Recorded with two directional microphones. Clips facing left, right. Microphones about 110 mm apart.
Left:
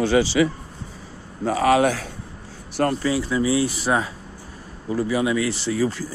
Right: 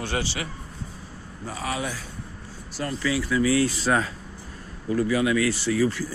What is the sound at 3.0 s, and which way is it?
Speech, 30° left (ahead or behind).